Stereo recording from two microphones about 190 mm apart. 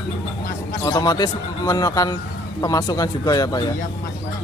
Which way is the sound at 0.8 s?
20° left (ahead or behind).